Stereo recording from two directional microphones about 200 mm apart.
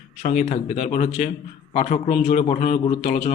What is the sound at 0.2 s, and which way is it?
A man's voice, 40° left (ahead or behind).